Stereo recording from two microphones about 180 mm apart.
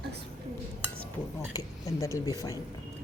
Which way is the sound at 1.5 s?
20° left (ahead or behind).